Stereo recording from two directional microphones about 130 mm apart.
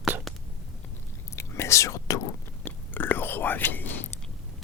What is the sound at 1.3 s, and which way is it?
Whispering, 20° left (ahead or behind).